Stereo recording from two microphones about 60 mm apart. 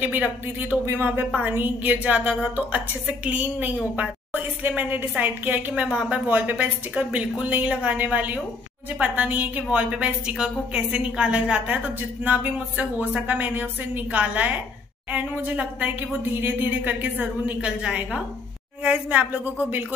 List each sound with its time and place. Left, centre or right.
0.0 s a woman's voice: right
5.8 s speech: centre
18.9 s speech: right